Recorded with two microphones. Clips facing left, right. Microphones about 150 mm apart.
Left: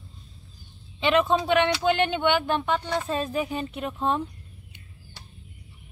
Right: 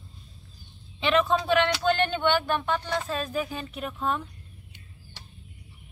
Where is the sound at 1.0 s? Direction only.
20° left (ahead or behind).